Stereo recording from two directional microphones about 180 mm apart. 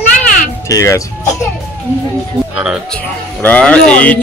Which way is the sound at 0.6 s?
20° left (ahead or behind).